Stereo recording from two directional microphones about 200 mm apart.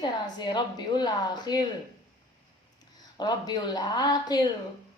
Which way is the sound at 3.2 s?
20° left (ahead or behind).